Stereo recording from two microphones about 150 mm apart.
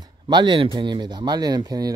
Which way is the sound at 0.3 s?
30° right (ahead or behind).